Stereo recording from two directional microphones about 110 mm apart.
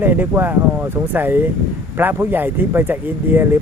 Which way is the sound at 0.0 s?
15° right (ahead or behind).